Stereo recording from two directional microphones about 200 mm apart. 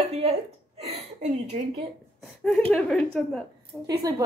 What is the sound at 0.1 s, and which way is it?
A woman's voice, 30° right (ahead or behind).